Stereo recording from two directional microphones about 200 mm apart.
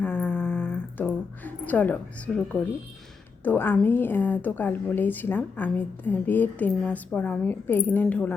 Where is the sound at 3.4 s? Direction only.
10° left (ahead or behind).